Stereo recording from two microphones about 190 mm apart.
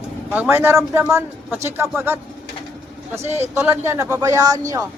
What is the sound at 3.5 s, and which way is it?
Speech, 15° right (ahead or behind).